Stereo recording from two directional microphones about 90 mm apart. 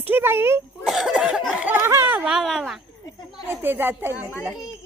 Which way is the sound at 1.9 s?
25° right (ahead or behind).